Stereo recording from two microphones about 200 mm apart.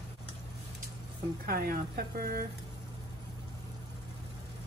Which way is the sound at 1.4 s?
45° right (ahead or behind).